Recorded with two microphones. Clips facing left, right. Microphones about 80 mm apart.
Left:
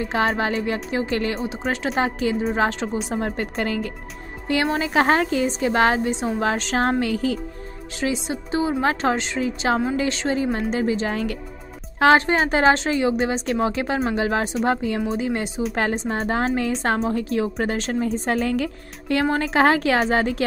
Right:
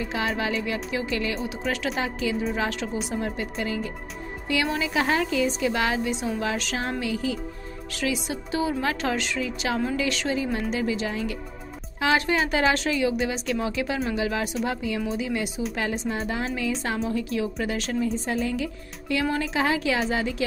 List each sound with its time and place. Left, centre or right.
0.0 s speech: left
3.1 s a woman's voice: left
4.5 s a woman's voice: left
7.9 s speech: left
11.1 s a woman's voice: left
12.2 s a woman's voice: left